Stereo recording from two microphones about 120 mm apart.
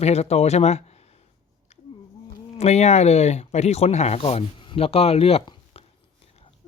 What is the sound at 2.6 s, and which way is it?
Speech, 65° left (ahead or behind).